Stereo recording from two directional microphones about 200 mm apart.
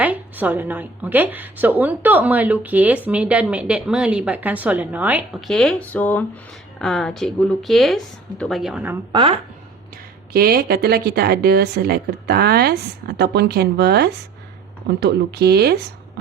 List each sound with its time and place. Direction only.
0.0 s a woman's voice: 10° right (ahead or behind)
9.1 s a woman's voice: 25° right (ahead or behind)
10.3 s speech: 50° right (ahead or behind)